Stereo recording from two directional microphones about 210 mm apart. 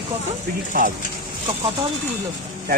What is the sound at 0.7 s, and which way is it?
Speech, 40° right (ahead or behind).